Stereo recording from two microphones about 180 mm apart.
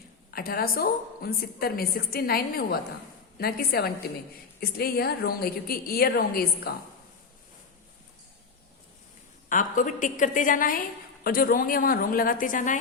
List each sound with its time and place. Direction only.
0.3 s a woman's voice: 55° left (ahead or behind)
9.5 s a woman's voice: 45° left (ahead or behind)